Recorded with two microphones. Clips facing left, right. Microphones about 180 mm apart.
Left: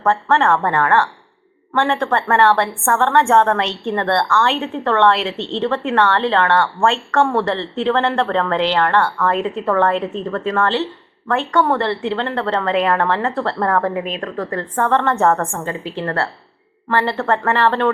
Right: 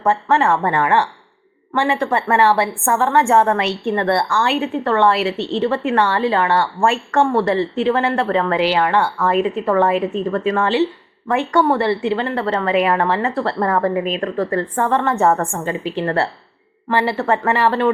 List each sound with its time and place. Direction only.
0.0 s a woman's voice: 15° right (ahead or behind)
0.3 s a woman's voice: centre (ahead or behind)
15.5 s a woman's voice: 15° right (ahead or behind)